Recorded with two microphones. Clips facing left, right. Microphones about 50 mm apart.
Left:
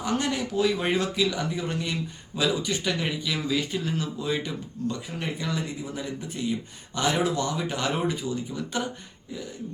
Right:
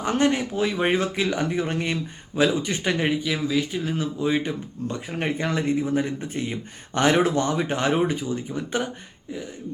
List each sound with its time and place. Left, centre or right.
0.0 s speech: right
3.3 s speech: centre
3.9 s speech: right